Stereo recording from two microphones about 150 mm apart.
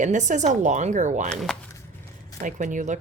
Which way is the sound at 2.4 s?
55° right (ahead or behind).